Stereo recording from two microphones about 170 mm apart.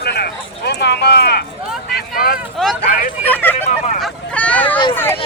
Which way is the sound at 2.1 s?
60° left (ahead or behind).